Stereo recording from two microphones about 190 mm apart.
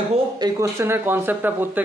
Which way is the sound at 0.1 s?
20° right (ahead or behind).